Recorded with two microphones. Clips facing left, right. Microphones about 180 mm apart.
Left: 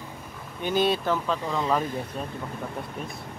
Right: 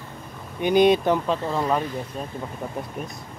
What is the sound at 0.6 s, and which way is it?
Speech, 15° right (ahead or behind).